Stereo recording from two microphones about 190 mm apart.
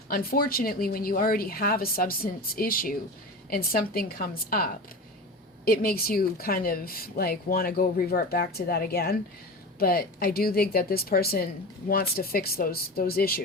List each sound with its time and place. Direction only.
0.1 s a woman's voice: 50° left (ahead or behind)